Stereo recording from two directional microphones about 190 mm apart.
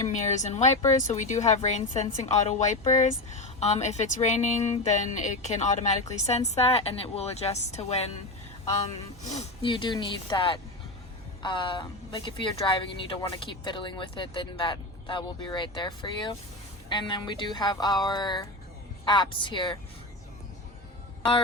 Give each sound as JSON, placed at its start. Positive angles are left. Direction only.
{"t": 0.1, "sound": "a woman's voice", "side_deg": 40}
{"t": 9.3, "sound": "speech", "side_deg": 30}